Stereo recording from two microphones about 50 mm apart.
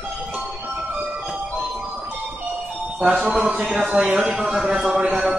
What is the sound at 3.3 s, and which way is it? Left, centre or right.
Speech, right.